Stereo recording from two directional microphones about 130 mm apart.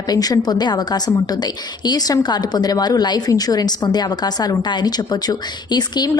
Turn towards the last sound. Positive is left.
turn(degrees=30)  # may be behind; listen again after turning